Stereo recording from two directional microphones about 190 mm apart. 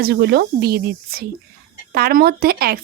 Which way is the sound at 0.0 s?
55° right (ahead or behind).